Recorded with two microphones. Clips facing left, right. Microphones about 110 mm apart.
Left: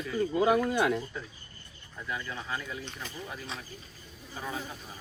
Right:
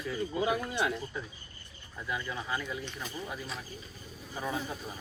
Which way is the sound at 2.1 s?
10° right (ahead or behind).